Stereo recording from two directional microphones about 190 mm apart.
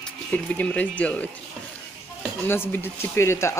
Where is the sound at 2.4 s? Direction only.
10° left (ahead or behind).